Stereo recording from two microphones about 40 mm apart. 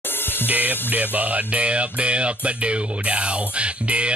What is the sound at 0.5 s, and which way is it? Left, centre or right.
Music, right.